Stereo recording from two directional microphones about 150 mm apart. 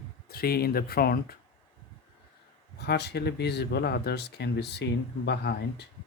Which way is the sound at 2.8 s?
90° left.